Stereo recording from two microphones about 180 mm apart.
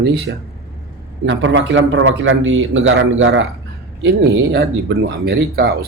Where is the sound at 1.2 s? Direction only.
90° right.